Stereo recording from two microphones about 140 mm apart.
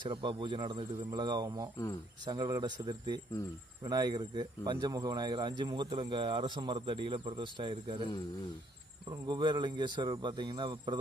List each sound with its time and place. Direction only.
0.0 s speech: 35° right (ahead or behind)
9.0 s speech: 30° right (ahead or behind)